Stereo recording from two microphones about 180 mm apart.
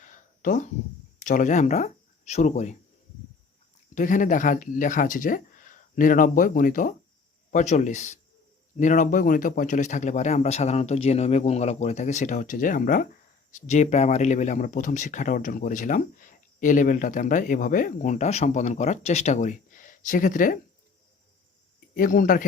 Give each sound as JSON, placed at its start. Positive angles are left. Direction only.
{"t": 0.0, "sound": "a sound", "side_deg": 45}
{"t": 1.2, "sound": "speech", "side_deg": 45}
{"t": 3.9, "sound": "speech", "side_deg": 45}
{"t": 21.9, "sound": "speech", "side_deg": 45}